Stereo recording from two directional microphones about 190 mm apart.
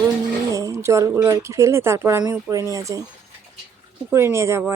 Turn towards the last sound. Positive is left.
turn(degrees=-15)  # may be behind; listen again after turning